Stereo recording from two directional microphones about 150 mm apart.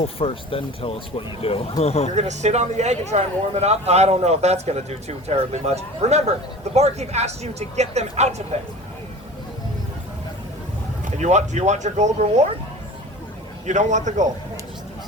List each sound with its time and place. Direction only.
0.0 s speech: 40° left (ahead or behind)
2.1 s speech: 50° right (ahead or behind)
11.0 s speech: 50° right (ahead or behind)
13.7 s speech: 55° right (ahead or behind)